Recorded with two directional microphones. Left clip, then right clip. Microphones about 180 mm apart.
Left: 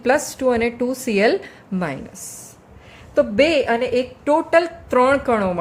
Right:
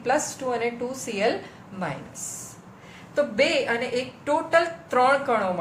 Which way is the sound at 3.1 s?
45° left (ahead or behind).